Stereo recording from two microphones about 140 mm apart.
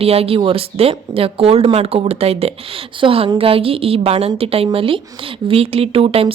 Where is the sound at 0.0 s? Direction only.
45° right (ahead or behind).